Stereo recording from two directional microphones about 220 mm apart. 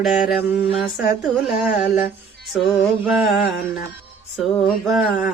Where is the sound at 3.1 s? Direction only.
Centre (ahead or behind).